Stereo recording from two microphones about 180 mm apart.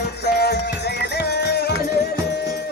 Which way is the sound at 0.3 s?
65° left (ahead or behind).